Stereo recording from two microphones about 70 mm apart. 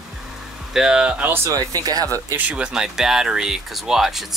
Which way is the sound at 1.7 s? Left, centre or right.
Right.